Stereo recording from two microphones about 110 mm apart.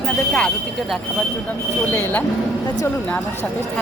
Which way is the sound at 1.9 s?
20° left (ahead or behind).